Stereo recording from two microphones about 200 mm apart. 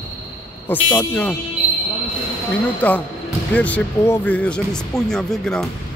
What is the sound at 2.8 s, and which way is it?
Speech, 5° left (ahead or behind).